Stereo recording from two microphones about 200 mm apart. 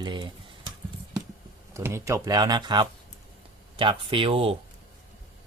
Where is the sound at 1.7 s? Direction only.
15° right (ahead or behind).